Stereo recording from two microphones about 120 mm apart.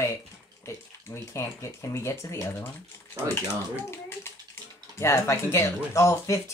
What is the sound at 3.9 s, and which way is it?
Speech, 20° left (ahead or behind).